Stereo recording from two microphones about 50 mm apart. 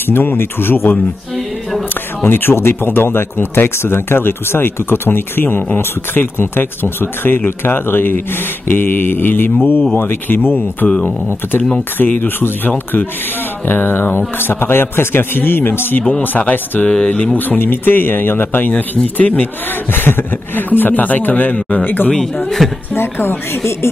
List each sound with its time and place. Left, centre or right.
0.0 s speech: left
2.2 s speech: left
12.0 s speech: left
16.2 s speech: left
17.6 s speech: left
19.9 s speech: left
21.5 s speech: left
21.8 s speech: left
22.6 s a woman's voice: centre
22.9 s a woman's voice: left